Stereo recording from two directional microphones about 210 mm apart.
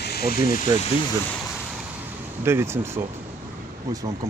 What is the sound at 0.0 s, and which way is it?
Vehicle, 50° left (ahead or behind).